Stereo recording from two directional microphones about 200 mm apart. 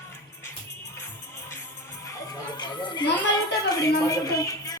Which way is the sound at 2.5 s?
20° left (ahead or behind).